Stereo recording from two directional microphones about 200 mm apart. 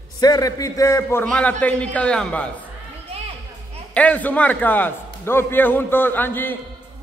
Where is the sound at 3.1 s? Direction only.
30° right (ahead or behind).